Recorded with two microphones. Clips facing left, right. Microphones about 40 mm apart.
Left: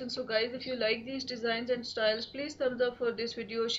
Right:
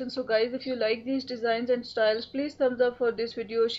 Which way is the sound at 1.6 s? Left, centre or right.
Centre.